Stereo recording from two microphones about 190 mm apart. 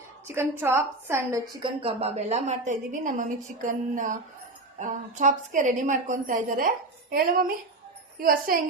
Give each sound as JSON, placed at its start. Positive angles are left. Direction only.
{"t": 0.3, "sound": "a woman's voice", "side_deg": -10}
{"t": 1.6, "sound": "a woman's voice", "side_deg": -30}